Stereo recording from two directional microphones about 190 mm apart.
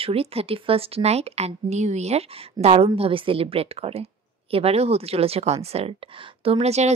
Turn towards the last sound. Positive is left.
turn(degrees=-35)  # may be behind; listen again after turning